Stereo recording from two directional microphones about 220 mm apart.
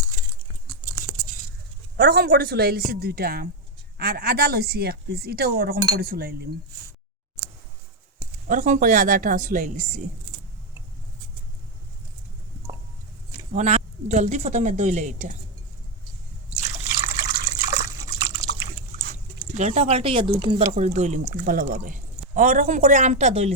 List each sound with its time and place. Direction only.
2.0 s speech: 45° right (ahead or behind)
8.4 s speech: 35° right (ahead or behind)
13.5 s speech: 30° right (ahead or behind)
16.6 s liquid: 30° right (ahead or behind)
17.3 s liquid: 15° right (ahead or behind)
19.5 s speech: 30° right (ahead or behind)
20.7 s speech: 30° right (ahead or behind)